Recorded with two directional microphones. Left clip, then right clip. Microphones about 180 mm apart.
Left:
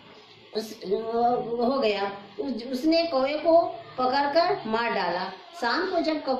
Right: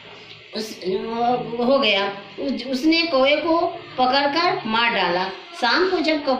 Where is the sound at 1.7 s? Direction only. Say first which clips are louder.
Right 10 dB; 20° left (ahead or behind).